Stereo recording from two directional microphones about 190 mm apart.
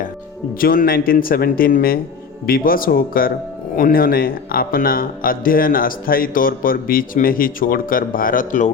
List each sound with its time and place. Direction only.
0.6 s a man's voice: 50° left (ahead or behind)